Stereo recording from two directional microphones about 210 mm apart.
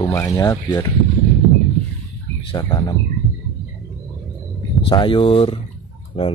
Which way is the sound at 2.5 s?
20° left (ahead or behind).